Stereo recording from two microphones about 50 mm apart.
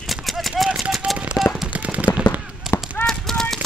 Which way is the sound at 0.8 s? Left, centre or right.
Centre.